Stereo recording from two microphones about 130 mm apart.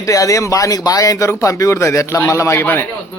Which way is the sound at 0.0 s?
25° left (ahead or behind).